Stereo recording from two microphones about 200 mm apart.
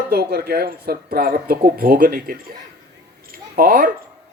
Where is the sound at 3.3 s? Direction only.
45° right (ahead or behind).